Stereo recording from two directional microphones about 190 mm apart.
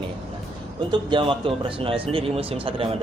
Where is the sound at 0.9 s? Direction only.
25° right (ahead or behind).